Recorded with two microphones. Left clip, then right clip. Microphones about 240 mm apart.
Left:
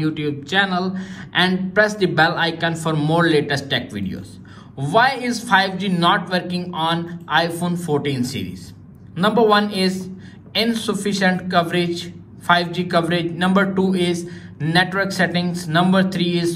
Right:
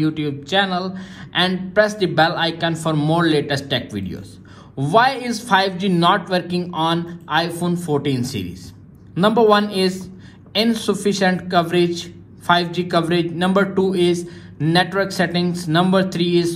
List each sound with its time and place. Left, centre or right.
0.0 s a man's voice: centre